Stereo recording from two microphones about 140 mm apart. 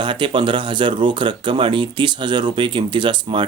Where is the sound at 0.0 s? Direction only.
35° right (ahead or behind).